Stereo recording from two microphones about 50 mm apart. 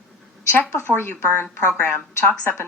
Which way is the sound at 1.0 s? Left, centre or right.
Left.